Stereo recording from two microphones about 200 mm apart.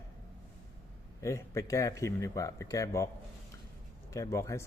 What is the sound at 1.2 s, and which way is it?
Speech, 15° left (ahead or behind).